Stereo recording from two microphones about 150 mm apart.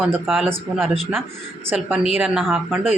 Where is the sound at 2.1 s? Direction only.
5° right (ahead or behind).